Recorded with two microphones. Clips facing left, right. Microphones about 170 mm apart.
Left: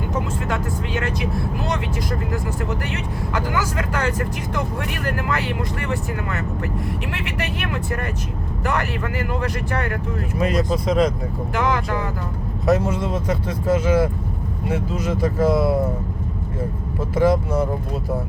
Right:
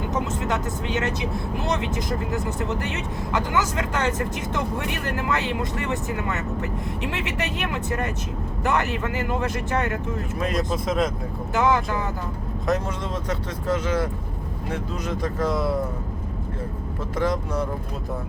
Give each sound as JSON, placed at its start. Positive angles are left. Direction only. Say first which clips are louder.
{"t": 0.4, "sound": "speech", "louder": "left 1 dB", "side_deg": -20}
{"t": 10.3, "sound": "speech", "louder": "left 5 dB", "side_deg": 0}
{"t": 12.6, "sound": "speech", "louder": "left 6 dB", "side_deg": 5}
{"t": 17.2, "sound": "speech", "louder": "left 6 dB", "side_deg": 5}